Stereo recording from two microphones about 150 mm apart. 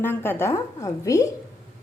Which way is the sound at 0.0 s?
15° left (ahead or behind).